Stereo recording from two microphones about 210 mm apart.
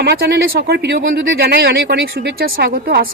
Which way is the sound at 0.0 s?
50° right (ahead or behind).